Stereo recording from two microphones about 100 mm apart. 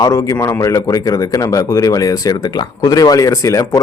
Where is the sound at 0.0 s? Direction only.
30° left (ahead or behind).